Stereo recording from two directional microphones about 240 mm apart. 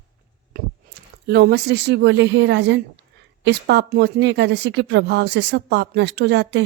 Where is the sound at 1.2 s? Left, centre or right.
Right.